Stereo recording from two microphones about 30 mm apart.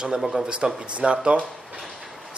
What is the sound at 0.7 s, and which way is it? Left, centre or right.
Speech, right.